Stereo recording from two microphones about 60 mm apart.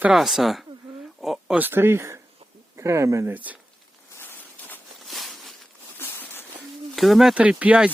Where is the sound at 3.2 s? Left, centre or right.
Right.